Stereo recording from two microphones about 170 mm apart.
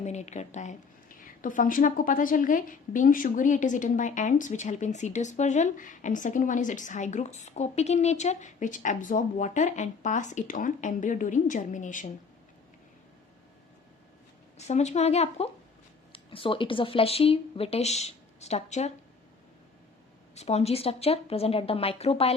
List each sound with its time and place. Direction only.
0.0 s a woman's voice: 45° left (ahead or behind)
14.7 s speech: 40° left (ahead or behind)
20.3 s speech: 40° left (ahead or behind)